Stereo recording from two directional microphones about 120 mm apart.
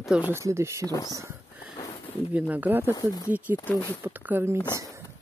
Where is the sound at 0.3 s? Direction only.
25° right (ahead or behind).